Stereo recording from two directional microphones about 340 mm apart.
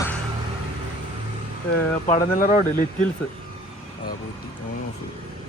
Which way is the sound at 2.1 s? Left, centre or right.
Left.